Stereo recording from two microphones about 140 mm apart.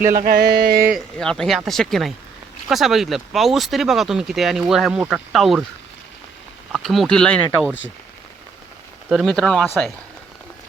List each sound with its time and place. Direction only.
0.0 s a sound: 80° right
1.2 s speech: 5° left (ahead or behind)
6.7 s speech: centre (ahead or behind)
9.0 s speech: centre (ahead or behind)